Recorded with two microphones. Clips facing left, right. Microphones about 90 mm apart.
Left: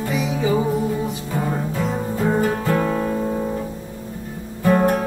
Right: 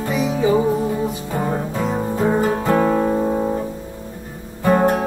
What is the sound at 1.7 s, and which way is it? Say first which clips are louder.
Guitar: right 2 dB; 25° right (ahead or behind).